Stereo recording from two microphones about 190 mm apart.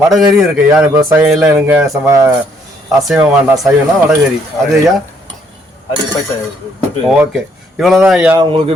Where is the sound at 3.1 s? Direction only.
Centre (ahead or behind).